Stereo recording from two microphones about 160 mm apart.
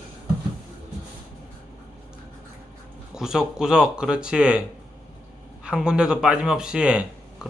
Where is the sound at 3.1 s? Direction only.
5° right (ahead or behind).